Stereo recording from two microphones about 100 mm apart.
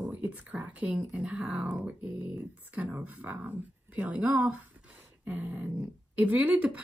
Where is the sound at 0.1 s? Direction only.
15° right (ahead or behind).